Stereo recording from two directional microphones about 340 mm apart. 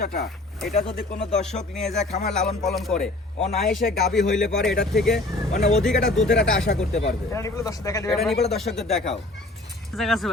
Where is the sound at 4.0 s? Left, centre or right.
Centre.